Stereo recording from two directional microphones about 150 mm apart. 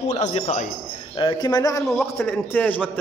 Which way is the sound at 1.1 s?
30° left (ahead or behind).